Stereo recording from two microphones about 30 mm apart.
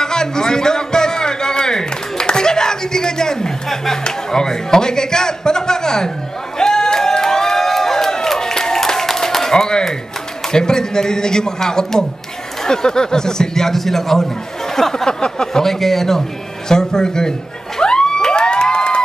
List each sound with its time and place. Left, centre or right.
0.0 s a sound: left
3.6 s speech: centre
4.0 s a man's voice: left
6.6 s crowd: left
9.5 s a sound: left
10.5 s a man's voice: left
15.0 s a man's voice: left
15.3 s speech: centre
17.7 s a sound: left